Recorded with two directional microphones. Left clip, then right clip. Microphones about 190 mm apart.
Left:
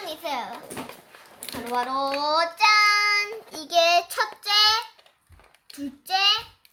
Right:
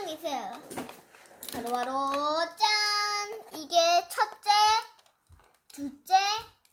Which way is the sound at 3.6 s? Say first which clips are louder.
Left 4 dB; 65° left (ahead or behind).